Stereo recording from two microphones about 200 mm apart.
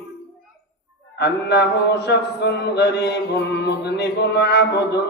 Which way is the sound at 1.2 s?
55° left (ahead or behind).